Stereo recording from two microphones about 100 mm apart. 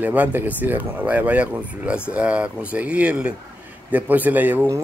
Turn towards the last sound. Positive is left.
turn(degrees=-20)  # may be behind; listen again after turning